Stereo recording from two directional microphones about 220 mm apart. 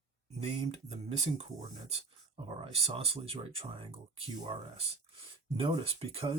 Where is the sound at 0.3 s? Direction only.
25° right (ahead or behind).